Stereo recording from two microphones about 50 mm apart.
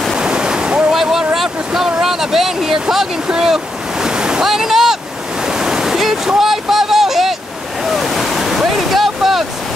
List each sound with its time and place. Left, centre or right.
0.2 s waves: centre
1.1 s a sound: centre
3.3 s waves: centre